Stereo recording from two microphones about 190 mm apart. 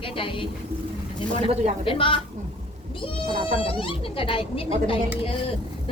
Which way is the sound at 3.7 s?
30° left (ahead or behind).